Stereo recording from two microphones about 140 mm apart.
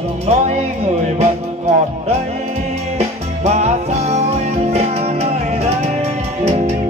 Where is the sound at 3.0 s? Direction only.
50° right (ahead or behind).